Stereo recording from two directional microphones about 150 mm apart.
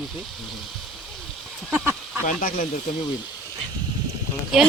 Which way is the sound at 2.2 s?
65° left (ahead or behind).